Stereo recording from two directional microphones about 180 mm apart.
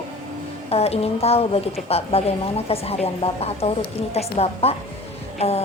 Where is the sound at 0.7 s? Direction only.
35° left (ahead or behind).